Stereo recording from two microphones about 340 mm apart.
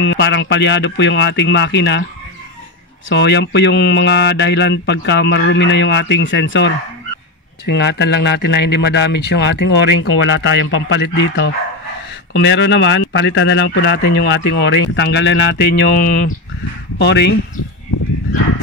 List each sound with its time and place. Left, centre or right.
0.0 s speech: left
3.1 s speech: left
7.7 s speech: left